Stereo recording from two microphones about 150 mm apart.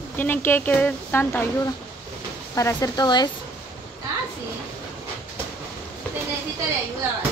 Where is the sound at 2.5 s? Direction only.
20° left (ahead or behind).